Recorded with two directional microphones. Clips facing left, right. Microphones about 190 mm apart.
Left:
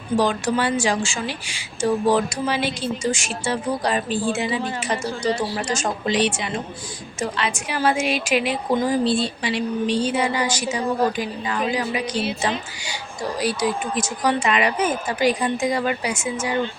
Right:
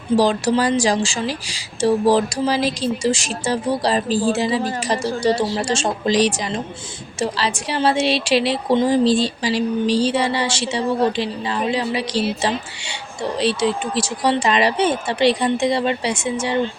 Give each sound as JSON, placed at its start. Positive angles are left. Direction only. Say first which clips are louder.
{"t": 0.2, "sound": "a woman's voice", "louder": "right 3 dB", "side_deg": -35}